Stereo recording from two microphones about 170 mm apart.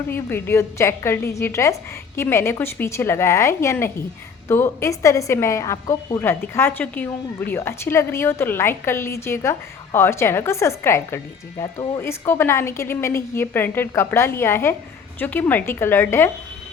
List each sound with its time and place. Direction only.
0.1 s a woman's voice: 10° left (ahead or behind)